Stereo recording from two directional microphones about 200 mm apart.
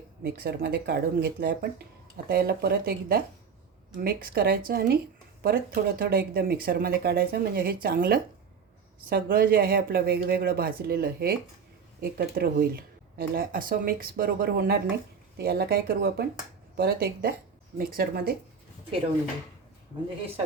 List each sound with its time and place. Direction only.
0.2 s speech: 50° right (ahead or behind)